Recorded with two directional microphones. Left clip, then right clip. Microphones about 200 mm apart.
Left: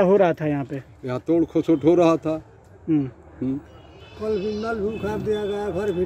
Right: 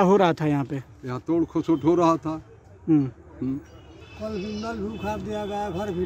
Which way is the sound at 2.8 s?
30° right (ahead or behind).